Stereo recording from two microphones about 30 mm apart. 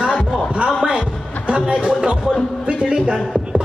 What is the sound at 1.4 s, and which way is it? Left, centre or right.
Speech, right.